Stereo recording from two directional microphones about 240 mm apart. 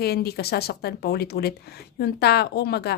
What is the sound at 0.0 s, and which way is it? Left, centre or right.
Speech, left.